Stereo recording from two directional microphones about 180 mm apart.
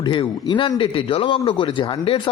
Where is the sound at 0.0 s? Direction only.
25° left (ahead or behind).